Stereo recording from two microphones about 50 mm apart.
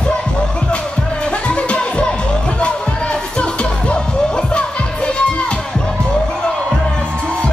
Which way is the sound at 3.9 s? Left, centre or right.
Left.